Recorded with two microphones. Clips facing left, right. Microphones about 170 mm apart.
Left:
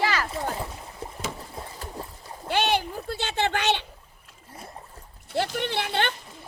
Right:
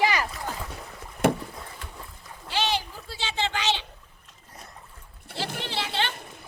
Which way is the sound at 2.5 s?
55° left (ahead or behind).